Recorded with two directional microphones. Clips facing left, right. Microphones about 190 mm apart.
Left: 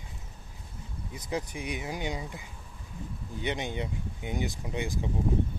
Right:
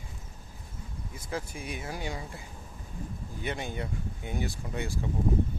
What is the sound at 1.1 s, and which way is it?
Speech, 15° left (ahead or behind).